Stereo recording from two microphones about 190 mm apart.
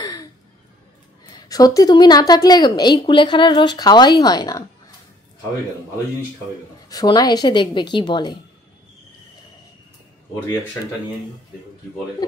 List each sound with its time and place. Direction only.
0.0 s a sound: 20° left (ahead or behind)
1.3 s a woman's voice: 20° left (ahead or behind)
6.9 s a woman's voice: 20° left (ahead or behind)